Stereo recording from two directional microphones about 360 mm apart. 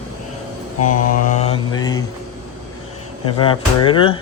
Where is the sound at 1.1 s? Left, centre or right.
Left.